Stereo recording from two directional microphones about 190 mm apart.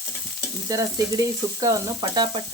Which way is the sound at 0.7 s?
20° right (ahead or behind).